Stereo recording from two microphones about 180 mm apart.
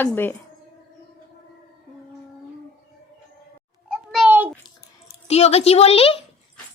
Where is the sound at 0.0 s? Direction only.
10° left (ahead or behind).